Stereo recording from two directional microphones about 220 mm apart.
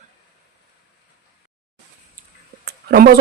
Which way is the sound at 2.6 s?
45° right (ahead or behind).